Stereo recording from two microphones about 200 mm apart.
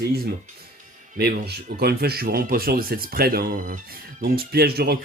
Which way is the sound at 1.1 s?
50° right (ahead or behind).